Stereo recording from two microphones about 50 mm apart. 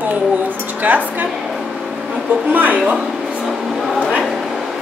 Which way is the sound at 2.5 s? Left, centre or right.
Right.